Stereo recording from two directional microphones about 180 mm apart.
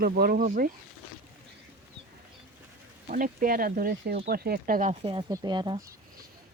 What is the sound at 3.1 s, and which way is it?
Speech, 50° right (ahead or behind).